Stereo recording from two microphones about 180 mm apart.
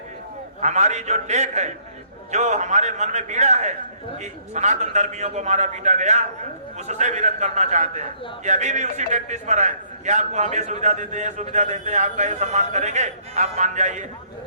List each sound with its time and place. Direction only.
0.6 s a man's voice: 40° right (ahead or behind)